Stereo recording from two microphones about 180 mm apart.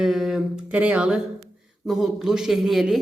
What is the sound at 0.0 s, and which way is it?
Speech, 5° right (ahead or behind).